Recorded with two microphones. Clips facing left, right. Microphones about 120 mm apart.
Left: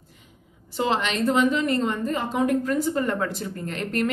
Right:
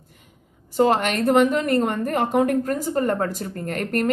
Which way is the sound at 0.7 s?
50° right (ahead or behind).